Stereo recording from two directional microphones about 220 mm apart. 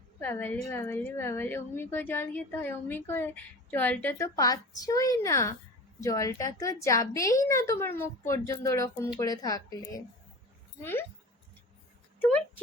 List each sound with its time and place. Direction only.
0.2 s a woman's voice: 10° left (ahead or behind)